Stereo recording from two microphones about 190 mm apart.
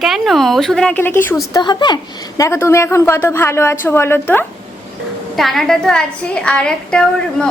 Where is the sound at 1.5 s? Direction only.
25° left (ahead or behind).